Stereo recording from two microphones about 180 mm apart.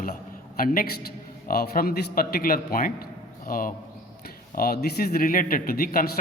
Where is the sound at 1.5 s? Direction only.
55° left (ahead or behind).